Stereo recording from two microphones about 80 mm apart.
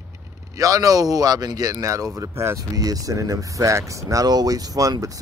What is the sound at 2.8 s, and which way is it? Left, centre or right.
Speech, right.